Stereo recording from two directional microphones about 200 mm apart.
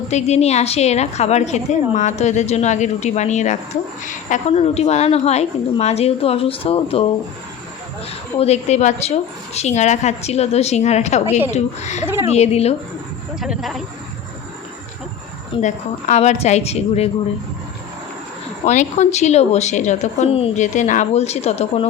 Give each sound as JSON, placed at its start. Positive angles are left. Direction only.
{"t": 0.1, "sound": "a woman's voice", "side_deg": 35}
{"t": 8.4, "sound": "a woman's voice", "side_deg": 35}
{"t": 12.0, "sound": "speech", "side_deg": -10}
{"t": 12.3, "sound": "a woman's voice", "side_deg": 30}
{"t": 13.4, "sound": "speech", "side_deg": 0}
{"t": 15.6, "sound": "a woman's voice", "side_deg": 35}
{"t": 18.6, "sound": "a woman's voice", "side_deg": 35}